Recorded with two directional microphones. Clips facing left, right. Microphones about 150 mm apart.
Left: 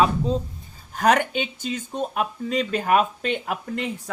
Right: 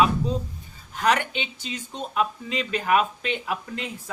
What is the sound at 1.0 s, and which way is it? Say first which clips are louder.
Speech: left 4 dB; 45° left (ahead or behind).